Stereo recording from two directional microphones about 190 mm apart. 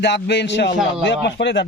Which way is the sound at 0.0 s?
65° left (ahead or behind).